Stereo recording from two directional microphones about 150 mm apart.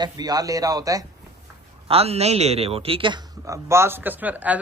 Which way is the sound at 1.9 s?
40° right (ahead or behind).